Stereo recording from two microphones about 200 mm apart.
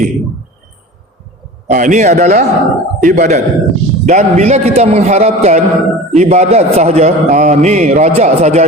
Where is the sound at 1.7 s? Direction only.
40° right (ahead or behind).